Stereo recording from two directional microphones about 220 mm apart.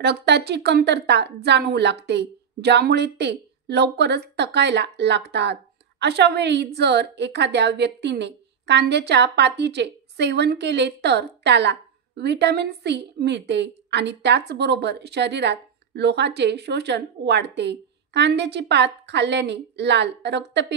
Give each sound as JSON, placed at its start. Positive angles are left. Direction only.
{"t": 0.0, "sound": "a woman's voice", "side_deg": -50}